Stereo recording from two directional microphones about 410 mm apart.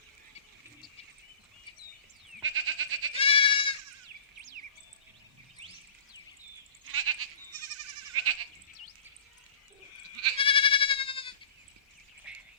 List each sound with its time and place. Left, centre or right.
2.4 s goat: right
3.2 s goat: centre
6.8 s goat: right
10.3 s goat: centre
12.3 s duck: centre